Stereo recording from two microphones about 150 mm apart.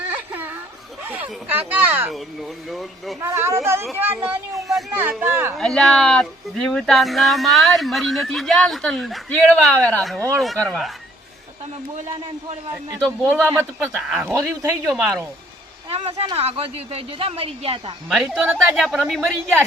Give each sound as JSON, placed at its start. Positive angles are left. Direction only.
{"t": 0.1, "sound": "a sound", "side_deg": -10}
{"t": 1.0, "sound": "speech", "side_deg": -10}
{"t": 2.1, "sound": "speech", "side_deg": 0}
{"t": 3.2, "sound": "speech", "side_deg": -15}
{"t": 5.5, "sound": "speech", "side_deg": 0}
{"t": 12.1, "sound": "speech", "side_deg": -40}
{"t": 13.3, "sound": "speech", "side_deg": -15}
{"t": 13.7, "sound": "speech", "side_deg": -5}
{"t": 14.3, "sound": "speech", "side_deg": -20}
{"t": 15.9, "sound": "speech", "side_deg": -40}
{"t": 18.1, "sound": "speech", "side_deg": -5}